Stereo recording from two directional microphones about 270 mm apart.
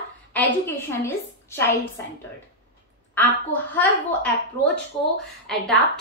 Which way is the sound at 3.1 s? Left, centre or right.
Centre.